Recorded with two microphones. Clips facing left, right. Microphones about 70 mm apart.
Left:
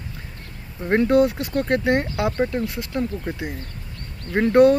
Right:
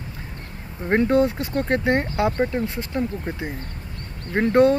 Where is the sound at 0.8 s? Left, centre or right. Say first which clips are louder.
Left 1 dB; centre.